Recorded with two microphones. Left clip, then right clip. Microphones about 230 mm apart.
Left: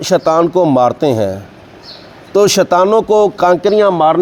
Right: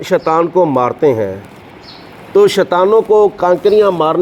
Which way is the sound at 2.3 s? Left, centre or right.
Left.